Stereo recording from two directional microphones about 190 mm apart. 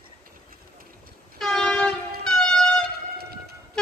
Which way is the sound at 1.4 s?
5° left (ahead or behind).